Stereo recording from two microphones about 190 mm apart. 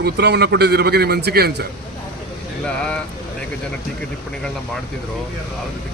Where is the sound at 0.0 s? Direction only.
60° right (ahead or behind).